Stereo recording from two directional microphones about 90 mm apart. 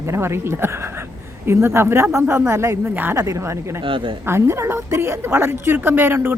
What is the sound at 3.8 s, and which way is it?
Speech, 70° right (ahead or behind).